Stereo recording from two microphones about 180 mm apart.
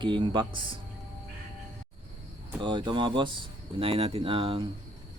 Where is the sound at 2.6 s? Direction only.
25° right (ahead or behind).